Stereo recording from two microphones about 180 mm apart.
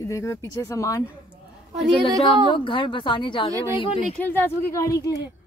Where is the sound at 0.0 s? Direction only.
15° left (ahead or behind).